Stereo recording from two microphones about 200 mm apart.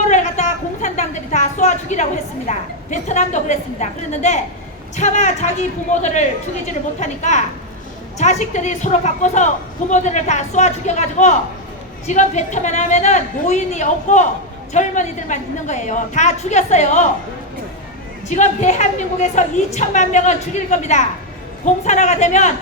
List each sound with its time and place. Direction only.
0.1 s a sound: 40° left (ahead or behind)
2.5 s a woman's voice: 35° left (ahead or behind)
18.3 s a woman's voice: 35° left (ahead or behind)